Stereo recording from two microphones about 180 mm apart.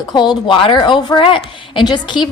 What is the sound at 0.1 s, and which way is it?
A woman's voice, 25° left (ahead or behind).